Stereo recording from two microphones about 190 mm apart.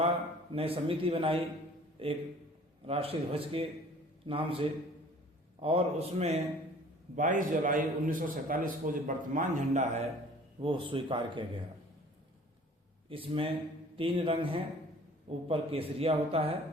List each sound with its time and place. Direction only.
0.5 s a man's voice: 30° right (ahead or behind)
13.1 s a man's voice: 30° right (ahead or behind)